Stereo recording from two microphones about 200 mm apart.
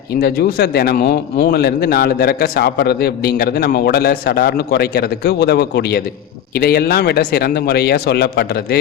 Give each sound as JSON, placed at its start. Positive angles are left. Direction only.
{"t": 0.2, "sound": "a man's voice", "side_deg": 55}